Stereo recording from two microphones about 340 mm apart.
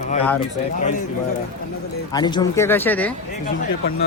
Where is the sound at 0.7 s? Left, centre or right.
Left.